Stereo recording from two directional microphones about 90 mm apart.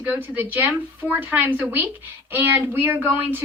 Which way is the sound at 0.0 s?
20° right (ahead or behind).